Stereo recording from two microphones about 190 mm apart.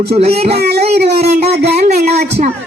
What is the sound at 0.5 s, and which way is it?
Speech, 55° right (ahead or behind).